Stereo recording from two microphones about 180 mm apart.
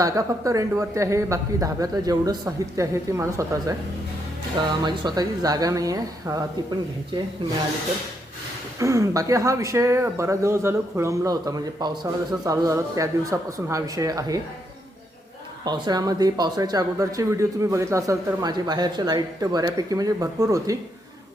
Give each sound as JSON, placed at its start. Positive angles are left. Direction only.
{"t": 0.0, "sound": "a woman's voice", "side_deg": -20}
{"t": 8.8, "sound": "a woman's voice", "side_deg": -15}
{"t": 15.6, "sound": "speech", "side_deg": -20}